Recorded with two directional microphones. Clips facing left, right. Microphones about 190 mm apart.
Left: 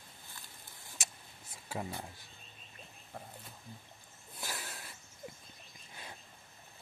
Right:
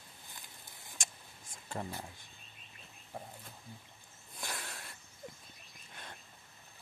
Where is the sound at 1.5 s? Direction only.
5° left (ahead or behind).